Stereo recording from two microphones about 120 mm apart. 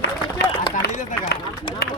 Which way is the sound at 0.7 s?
90° left.